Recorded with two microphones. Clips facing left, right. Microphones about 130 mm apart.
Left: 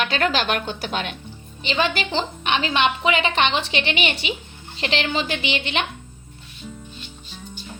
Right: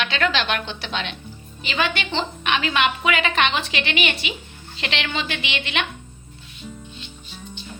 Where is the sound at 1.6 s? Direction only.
30° left (ahead or behind).